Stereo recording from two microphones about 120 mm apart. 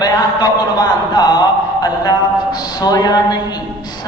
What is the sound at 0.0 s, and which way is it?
A man's voice, 35° left (ahead or behind).